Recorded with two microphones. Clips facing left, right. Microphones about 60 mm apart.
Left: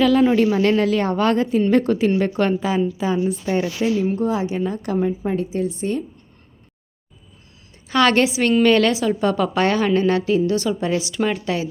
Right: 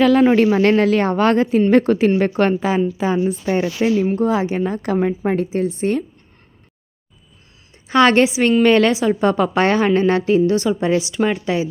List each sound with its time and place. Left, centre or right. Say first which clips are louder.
0.0 s a woman's voice: right 3 dB; right
4.1 s a woman's voice: right 3 dB; right
4.4 s a woman's voice: right 3 dB; right
7.9 s a woman's voice: right 3 dB; right